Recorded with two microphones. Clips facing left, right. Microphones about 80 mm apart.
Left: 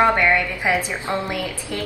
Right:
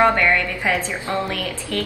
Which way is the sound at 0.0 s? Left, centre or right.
Centre.